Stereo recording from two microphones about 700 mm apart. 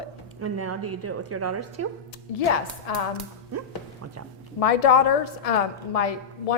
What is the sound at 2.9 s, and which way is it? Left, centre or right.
Speech, left.